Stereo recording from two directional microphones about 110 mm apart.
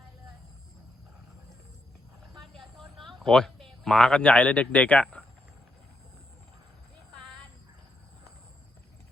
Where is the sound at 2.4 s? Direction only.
Centre (ahead or behind).